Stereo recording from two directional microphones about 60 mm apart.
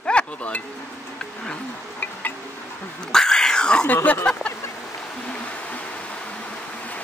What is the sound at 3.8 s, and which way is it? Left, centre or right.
Speech, left.